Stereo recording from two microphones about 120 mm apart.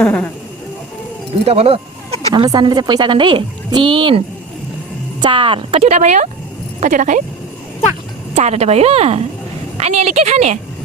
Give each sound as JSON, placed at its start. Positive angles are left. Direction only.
{"t": 0.0, "sound": "speech", "side_deg": 10}
{"t": 1.5, "sound": "speech", "side_deg": -60}
{"t": 2.3, "sound": "a woman's voice", "side_deg": -40}
{"t": 5.2, "sound": "speech", "side_deg": -45}
{"t": 6.7, "sound": "speech", "side_deg": -90}
{"t": 8.4, "sound": "a woman's voice", "side_deg": -65}